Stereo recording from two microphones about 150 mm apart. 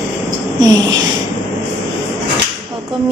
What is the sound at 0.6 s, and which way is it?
Speech, 25° right (ahead or behind).